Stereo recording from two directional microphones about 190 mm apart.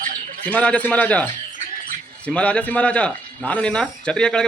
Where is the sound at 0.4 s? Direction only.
5° left (ahead or behind).